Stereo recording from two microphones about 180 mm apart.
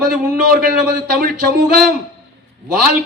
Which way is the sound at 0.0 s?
60° right (ahead or behind).